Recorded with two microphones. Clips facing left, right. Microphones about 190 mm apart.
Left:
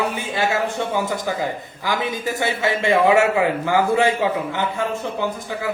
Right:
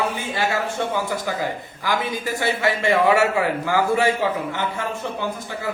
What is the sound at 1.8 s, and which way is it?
A man's voice, 20° left (ahead or behind).